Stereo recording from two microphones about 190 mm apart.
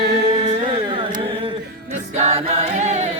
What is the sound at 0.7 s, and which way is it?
Carnatic music, 25° right (ahead or behind).